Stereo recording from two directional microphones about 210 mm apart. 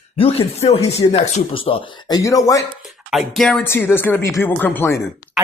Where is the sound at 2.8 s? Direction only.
Centre (ahead or behind).